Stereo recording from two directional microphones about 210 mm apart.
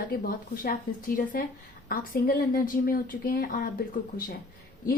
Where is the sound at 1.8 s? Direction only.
45° left (ahead or behind).